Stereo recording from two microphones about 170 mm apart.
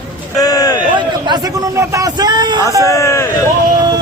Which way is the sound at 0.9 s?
25° right (ahead or behind).